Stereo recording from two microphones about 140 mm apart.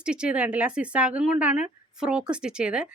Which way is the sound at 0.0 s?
5° right (ahead or behind).